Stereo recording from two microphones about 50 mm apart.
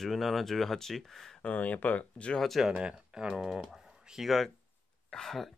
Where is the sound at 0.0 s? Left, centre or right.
Centre.